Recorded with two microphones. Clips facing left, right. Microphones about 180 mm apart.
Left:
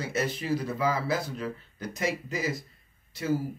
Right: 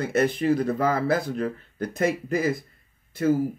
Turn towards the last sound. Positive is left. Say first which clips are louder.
# right 7 dB
turn(degrees=-55)  # may be behind; listen again after turning